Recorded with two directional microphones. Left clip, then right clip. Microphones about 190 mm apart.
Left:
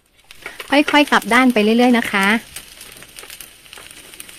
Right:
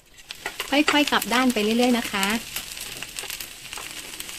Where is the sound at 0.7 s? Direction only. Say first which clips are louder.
Left 7 dB; 35° left (ahead or behind).